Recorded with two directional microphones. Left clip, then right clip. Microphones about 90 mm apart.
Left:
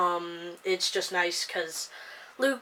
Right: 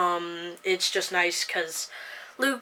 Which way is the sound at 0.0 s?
30° right (ahead or behind).